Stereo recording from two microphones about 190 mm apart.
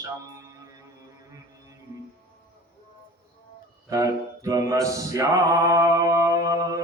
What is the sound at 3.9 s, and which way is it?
Mantra, 15° right (ahead or behind).